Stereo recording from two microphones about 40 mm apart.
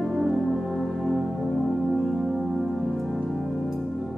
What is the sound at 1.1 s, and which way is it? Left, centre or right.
Music, centre.